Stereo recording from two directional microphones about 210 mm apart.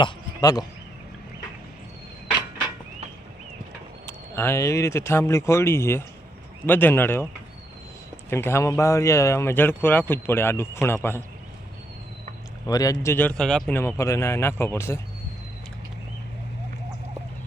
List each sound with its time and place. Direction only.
0.0 s speech: 20° left (ahead or behind)
4.0 s speech: 10° left (ahead or behind)
8.3 s speech: 10° left (ahead or behind)
12.6 s speech: 15° left (ahead or behind)